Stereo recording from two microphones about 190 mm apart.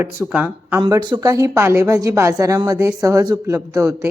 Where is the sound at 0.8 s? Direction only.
25° right (ahead or behind).